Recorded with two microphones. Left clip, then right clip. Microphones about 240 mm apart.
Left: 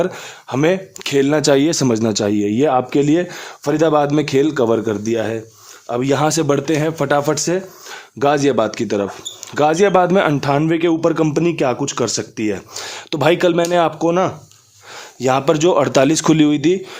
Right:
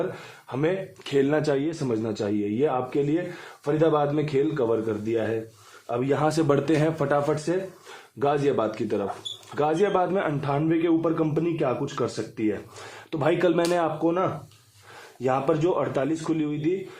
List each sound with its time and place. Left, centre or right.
0.5 s a man's voice: left
1.0 s a man's voice: left
6.2 s a man's voice: left
14.0 s a man's voice: left